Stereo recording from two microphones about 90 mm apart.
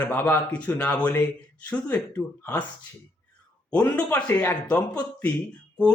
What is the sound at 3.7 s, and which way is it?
Speech, 10° left (ahead or behind).